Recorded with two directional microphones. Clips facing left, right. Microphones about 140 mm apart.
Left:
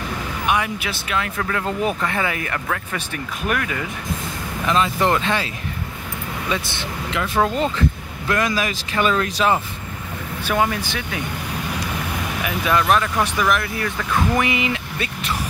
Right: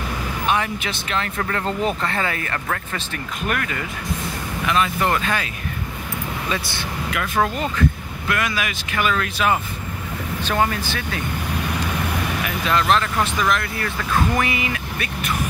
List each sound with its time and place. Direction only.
0.5 s speech: 10° left (ahead or behind)
4.6 s speech: 30° left (ahead or behind)
7.4 s speech: 25° left (ahead or behind)
10.4 s speech: 10° left (ahead or behind)
12.4 s speech: 10° left (ahead or behind)